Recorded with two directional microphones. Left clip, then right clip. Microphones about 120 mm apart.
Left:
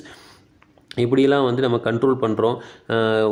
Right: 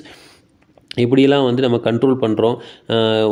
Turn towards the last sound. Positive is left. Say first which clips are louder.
# right 3 dB
turn(degrees=-20)  # may be behind; listen again after turning